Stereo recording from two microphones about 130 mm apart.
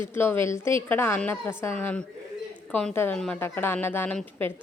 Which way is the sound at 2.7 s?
5° left (ahead or behind).